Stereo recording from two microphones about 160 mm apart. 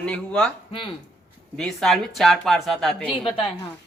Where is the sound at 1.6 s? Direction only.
5° left (ahead or behind).